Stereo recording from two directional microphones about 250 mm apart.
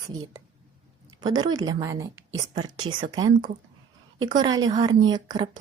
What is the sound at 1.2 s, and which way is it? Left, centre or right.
Speech, centre.